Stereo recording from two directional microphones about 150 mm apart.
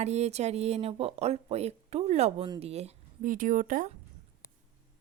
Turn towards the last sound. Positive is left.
turn(degrees=-65)  # may be behind; listen again after turning